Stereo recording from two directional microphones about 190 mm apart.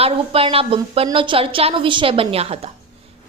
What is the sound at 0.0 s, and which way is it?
A woman's voice, 30° right (ahead or behind).